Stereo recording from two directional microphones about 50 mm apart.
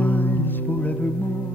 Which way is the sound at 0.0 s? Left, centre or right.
Left.